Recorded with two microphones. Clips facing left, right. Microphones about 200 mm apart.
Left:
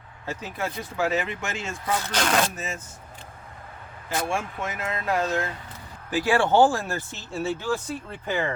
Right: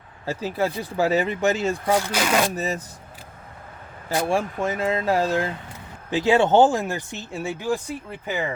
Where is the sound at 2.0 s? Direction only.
10° right (ahead or behind).